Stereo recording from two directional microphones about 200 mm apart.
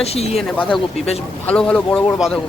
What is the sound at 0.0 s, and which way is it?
Speech, 30° left (ahead or behind).